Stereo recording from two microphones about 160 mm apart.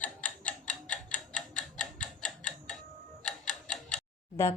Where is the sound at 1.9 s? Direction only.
5° left (ahead or behind).